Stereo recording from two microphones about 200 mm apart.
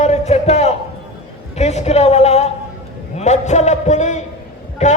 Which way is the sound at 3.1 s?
35° left (ahead or behind).